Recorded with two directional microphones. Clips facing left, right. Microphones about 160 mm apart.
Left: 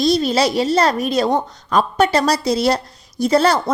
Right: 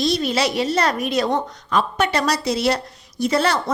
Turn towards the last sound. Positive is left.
turn(degrees=35)  # may be behind; listen again after turning